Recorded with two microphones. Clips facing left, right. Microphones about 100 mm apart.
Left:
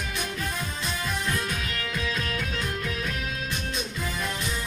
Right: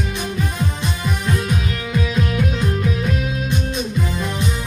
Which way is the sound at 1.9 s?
15° right (ahead or behind).